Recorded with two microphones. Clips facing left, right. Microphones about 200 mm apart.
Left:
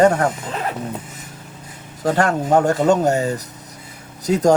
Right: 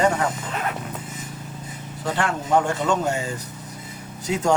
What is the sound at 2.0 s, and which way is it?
Speech, 40° left (ahead or behind).